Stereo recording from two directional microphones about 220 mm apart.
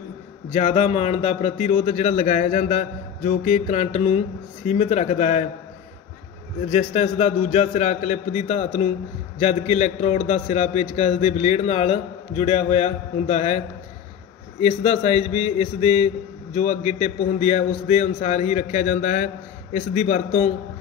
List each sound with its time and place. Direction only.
0.5 s a man's voice: 30° left (ahead or behind)
6.7 s a man's voice: 30° left (ahead or behind)
14.6 s a man's voice: 30° left (ahead or behind)